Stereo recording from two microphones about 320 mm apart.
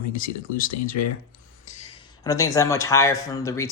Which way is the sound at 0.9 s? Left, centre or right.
Left.